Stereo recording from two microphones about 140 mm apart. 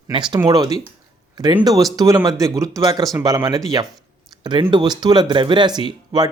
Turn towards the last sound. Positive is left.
turn(degrees=-30)  # may be behind; listen again after turning